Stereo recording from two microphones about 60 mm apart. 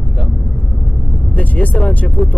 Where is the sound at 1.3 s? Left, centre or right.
Left.